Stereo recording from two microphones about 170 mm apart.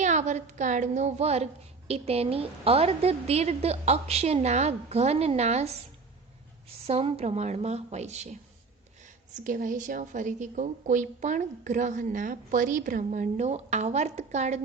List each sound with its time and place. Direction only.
0.0 s a woman's voice: 45° right (ahead or behind)
6.8 s a woman's voice: 35° right (ahead or behind)
9.4 s a woman's voice: 50° right (ahead or behind)